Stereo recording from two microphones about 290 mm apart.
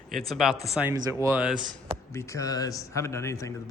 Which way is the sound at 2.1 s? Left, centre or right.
Centre.